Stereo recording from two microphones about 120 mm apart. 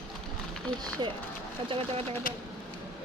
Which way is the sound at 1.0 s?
40° right (ahead or behind).